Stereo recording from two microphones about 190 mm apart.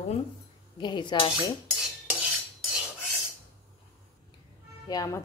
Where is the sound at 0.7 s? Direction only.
25° left (ahead or behind).